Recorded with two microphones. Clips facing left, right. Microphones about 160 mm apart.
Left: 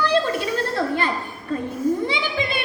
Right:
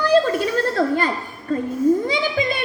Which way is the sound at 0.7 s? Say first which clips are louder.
Right 3 dB; 40° right (ahead or behind).